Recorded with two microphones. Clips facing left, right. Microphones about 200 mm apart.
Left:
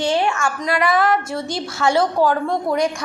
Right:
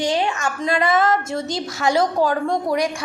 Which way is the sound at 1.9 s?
40° right (ahead or behind).